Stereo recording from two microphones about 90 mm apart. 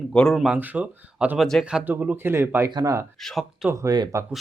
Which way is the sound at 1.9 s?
20° right (ahead or behind).